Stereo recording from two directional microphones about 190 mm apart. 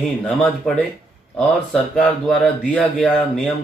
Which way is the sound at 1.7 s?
5° left (ahead or behind).